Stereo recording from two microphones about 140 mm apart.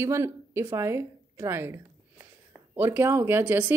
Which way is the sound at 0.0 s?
20° right (ahead or behind).